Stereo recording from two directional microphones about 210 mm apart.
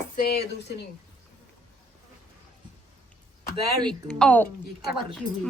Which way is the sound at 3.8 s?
5° left (ahead or behind).